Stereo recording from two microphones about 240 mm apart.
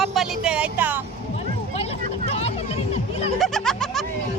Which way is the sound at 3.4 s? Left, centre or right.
Centre.